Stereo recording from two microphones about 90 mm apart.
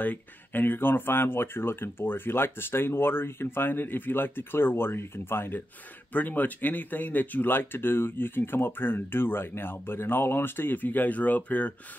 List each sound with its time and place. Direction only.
0.0 s speech: 20° left (ahead or behind)